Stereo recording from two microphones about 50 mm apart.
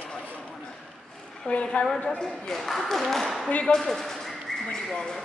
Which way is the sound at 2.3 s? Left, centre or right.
Centre.